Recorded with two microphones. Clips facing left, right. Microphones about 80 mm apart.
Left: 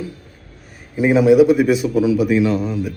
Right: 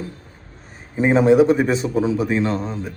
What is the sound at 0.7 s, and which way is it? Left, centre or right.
A man's voice, right.